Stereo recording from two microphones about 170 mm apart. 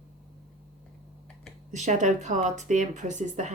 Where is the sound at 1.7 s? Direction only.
45° right (ahead or behind).